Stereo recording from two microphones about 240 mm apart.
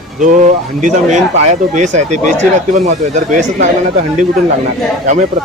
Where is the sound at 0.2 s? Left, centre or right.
Right.